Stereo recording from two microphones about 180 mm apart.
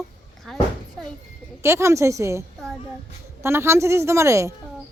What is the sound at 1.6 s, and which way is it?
Speech, 15° right (ahead or behind).